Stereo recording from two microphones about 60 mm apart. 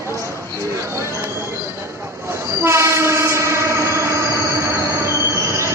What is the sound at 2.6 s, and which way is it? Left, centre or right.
Train, right.